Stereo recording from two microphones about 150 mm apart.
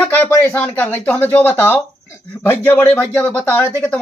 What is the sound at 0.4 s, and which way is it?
Speech, 15° left (ahead or behind).